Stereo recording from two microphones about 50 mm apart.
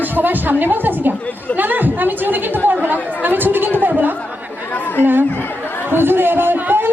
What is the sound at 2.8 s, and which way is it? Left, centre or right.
Chatter, right.